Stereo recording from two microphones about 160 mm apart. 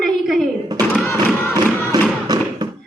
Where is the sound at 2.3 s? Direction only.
25° right (ahead or behind).